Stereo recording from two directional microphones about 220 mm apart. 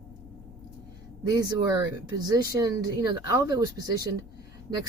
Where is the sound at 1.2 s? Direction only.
15° right (ahead or behind).